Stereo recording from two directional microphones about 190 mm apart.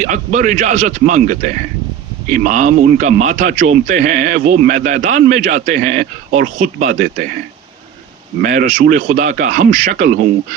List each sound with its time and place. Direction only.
0.0 s a man's voice: 45° right (ahead or behind)
8.4 s a man's voice: 45° right (ahead or behind)